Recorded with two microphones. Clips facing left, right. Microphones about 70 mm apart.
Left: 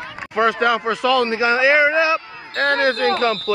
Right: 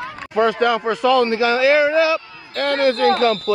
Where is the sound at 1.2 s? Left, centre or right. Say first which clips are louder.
Right 1 dB; left.